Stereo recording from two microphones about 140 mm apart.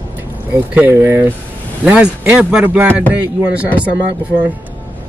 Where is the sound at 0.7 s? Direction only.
15° right (ahead or behind).